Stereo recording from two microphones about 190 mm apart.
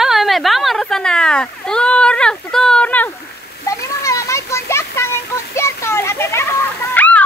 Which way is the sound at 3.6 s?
15° left (ahead or behind).